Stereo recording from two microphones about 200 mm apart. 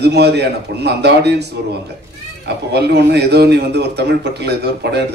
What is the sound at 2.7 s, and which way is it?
A man's voice, 55° right (ahead or behind).